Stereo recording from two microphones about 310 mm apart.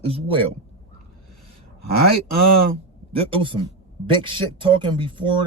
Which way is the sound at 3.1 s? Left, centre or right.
Centre.